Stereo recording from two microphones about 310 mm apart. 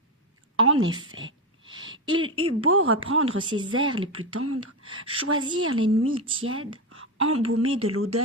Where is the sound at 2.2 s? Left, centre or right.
Centre.